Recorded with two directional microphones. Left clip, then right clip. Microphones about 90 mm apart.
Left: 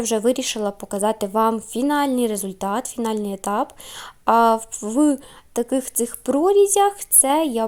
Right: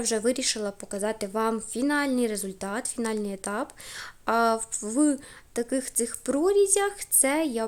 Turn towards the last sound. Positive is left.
turn(degrees=35)  # may be behind; listen again after turning